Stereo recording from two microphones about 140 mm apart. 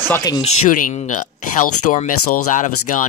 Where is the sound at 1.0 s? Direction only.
60° left (ahead or behind).